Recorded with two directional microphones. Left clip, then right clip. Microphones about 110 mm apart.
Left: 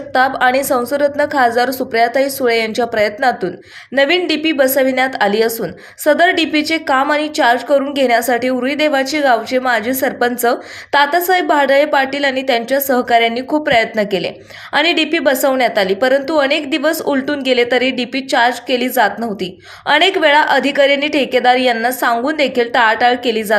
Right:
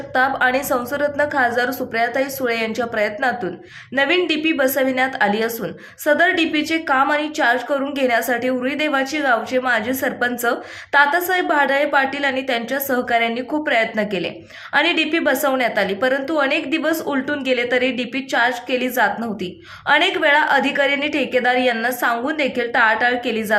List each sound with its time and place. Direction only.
0.1 s a woman's voice: 30° left (ahead or behind)